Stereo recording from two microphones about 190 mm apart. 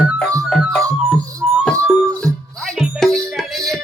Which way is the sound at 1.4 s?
5° right (ahead or behind).